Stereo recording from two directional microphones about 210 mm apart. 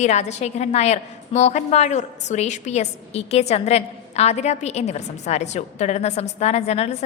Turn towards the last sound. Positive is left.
turn(degrees=30)  # may be behind; listen again after turning